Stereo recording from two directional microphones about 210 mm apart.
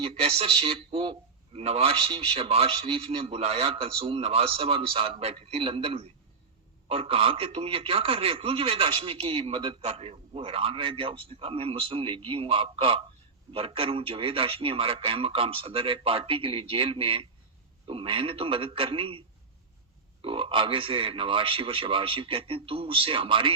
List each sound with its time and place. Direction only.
0.0 s a man's voice: 25° right (ahead or behind)
20.2 s a man's voice: 25° right (ahead or behind)